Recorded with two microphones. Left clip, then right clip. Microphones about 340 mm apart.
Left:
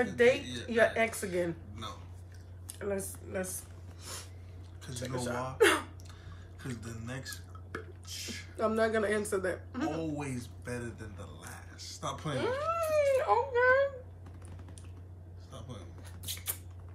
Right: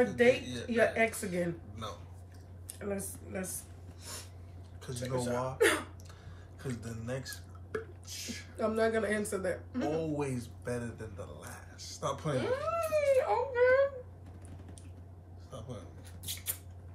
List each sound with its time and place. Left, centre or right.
0.0 s speech: centre
1.8 s speech: centre
2.8 s speech: centre
4.0 s a sound: centre
5.0 s speech: centre
6.8 s speech: centre
8.5 s speech: centre
9.9 s speech: centre
12.4 s speech: centre
15.5 s a sound: centre
16.3 s rodents: centre